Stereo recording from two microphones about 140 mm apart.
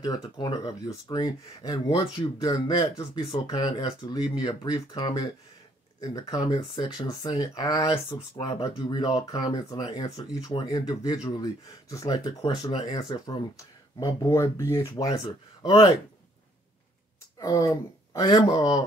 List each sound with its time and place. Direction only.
0.0 s speech: 30° left (ahead or behind)
10.2 s speech: 40° left (ahead or behind)
14.3 s speech: 20° left (ahead or behind)
17.4 s speech: 25° left (ahead or behind)